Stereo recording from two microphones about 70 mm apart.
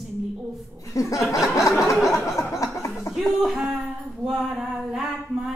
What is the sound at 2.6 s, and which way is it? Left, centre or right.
Speech, left.